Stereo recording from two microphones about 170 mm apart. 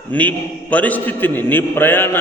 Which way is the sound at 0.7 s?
10° left (ahead or behind).